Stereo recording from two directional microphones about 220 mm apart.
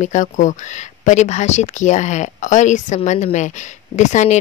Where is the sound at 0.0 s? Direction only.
35° left (ahead or behind).